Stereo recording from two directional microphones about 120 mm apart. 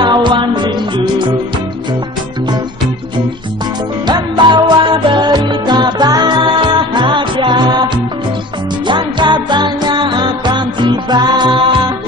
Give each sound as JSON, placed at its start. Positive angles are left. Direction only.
{"t": 0.0, "sound": "music", "side_deg": -40}
{"t": 4.1, "sound": "music", "side_deg": -40}
{"t": 8.8, "sound": "music", "side_deg": -40}